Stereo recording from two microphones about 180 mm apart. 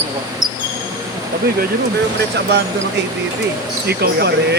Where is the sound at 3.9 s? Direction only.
65° right (ahead or behind).